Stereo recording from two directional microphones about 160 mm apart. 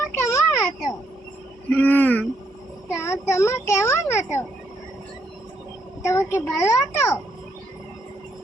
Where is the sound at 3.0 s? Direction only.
15° left (ahead or behind).